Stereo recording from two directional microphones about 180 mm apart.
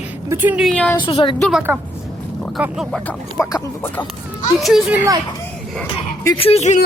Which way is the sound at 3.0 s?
10° left (ahead or behind).